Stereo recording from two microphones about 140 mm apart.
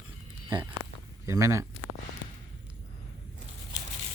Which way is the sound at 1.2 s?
20° right (ahead or behind).